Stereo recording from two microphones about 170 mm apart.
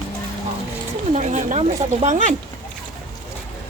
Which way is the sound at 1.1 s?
45° right (ahead or behind).